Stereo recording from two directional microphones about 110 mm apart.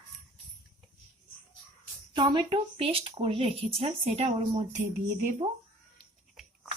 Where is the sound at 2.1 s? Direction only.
45° right (ahead or behind); by 4.7 s 70° right (ahead or behind).